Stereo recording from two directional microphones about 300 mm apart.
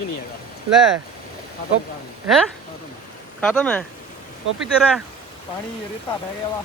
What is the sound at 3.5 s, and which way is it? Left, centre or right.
Speech, centre.